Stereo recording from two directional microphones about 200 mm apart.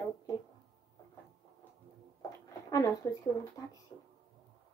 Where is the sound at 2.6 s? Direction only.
20° left (ahead or behind).